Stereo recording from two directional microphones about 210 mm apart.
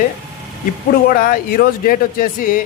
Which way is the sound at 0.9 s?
40° left (ahead or behind).